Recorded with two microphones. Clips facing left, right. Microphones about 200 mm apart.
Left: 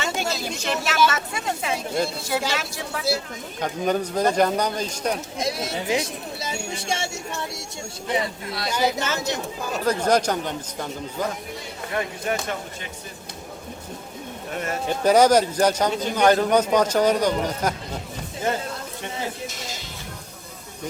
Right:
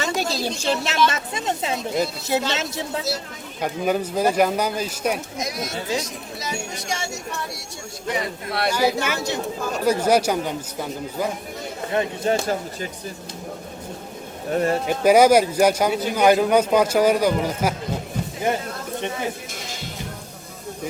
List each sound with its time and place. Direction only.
0.0 s a woman's voice: 35° right (ahead or behind)
3.6 s speech: 10° right (ahead or behind)
5.4 s speech: 30° left (ahead or behind)
8.7 s speech: 10° right (ahead or behind)
11.9 s a woman's voice: 25° right (ahead or behind)
14.5 s speech: 35° right (ahead or behind)
14.8 s speech: 10° right (ahead or behind)